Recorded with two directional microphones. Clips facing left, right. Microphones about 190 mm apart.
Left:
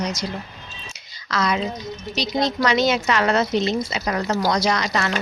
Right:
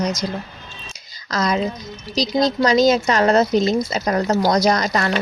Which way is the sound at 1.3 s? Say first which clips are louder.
Right 2 dB; 40° right (ahead or behind).